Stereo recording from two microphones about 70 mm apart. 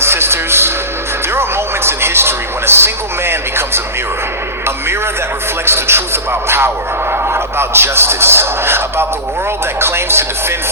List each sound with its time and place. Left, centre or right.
0.0 s a sound: right
1.4 s television: right
5.6 s speech: right
7.3 s speech: right